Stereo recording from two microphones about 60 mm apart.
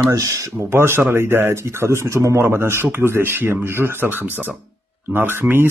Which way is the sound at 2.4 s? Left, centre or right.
Right.